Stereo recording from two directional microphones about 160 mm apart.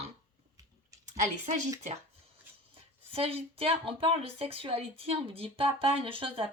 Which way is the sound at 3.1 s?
35° right (ahead or behind).